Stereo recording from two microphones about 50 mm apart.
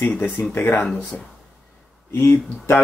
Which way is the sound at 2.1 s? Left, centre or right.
Left.